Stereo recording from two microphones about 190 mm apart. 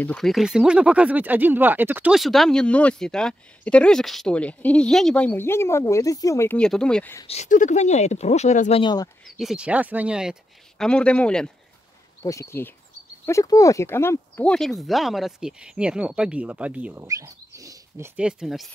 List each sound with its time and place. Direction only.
0.0 s speech: 5° left (ahead or behind)
7.2 s speech: 40° left (ahead or behind); by 9.1 s 20° left (ahead or behind)
9.2 s speech: centre (ahead or behind)
10.8 s speech: 5° left (ahead or behind)
12.2 s speech: 15° left (ahead or behind); by 18.7 s centre (ahead or behind)